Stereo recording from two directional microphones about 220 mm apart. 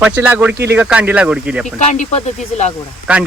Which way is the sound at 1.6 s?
35° left (ahead or behind).